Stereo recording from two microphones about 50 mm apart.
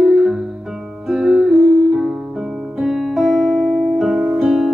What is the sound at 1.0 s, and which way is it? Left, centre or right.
Music, centre.